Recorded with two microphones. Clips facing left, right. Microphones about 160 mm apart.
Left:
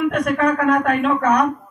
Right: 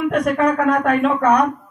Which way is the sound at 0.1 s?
40° right (ahead or behind).